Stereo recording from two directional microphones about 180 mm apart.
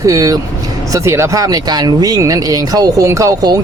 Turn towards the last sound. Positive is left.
turn(degrees=-20)  # may be behind; listen again after turning